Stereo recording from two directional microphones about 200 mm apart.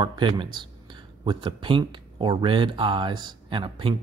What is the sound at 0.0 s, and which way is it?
Speech, 25° right (ahead or behind).